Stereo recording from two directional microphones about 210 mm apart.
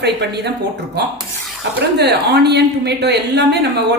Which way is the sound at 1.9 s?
50° right (ahead or behind).